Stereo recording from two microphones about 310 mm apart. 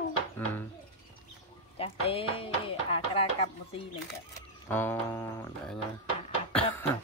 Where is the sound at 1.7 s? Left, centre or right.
Centre.